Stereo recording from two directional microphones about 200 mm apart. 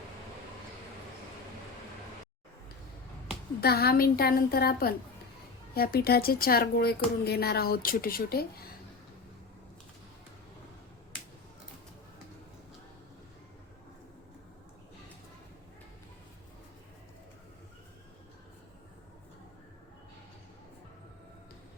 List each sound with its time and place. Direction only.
3.6 s speech: 50° left (ahead or behind)